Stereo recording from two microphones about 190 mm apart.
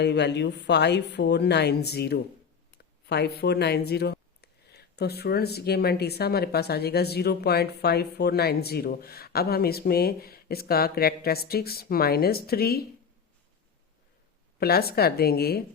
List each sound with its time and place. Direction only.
0.0 s speech: 65° left (ahead or behind)
14.6 s speech: 55° left (ahead or behind)